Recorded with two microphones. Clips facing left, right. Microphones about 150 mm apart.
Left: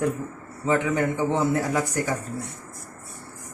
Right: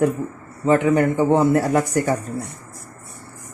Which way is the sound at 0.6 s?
50° right (ahead or behind).